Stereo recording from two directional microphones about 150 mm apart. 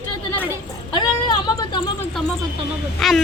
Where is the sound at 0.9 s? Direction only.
30° left (ahead or behind).